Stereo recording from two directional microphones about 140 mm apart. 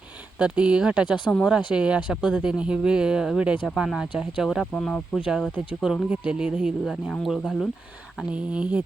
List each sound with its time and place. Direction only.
0.3 s speech: 10° right (ahead or behind)
1.0 s speech: 35° left (ahead or behind)
1.7 s speech: 10° right (ahead or behind)